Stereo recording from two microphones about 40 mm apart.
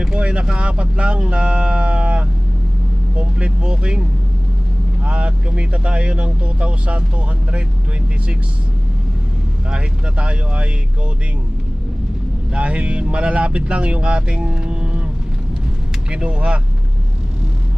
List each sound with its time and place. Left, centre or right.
0.2 s vehicle: right
0.4 s speech: right
5.0 s speech: right
9.6 s speech: right
12.5 s speech: right
16.0 s speech: right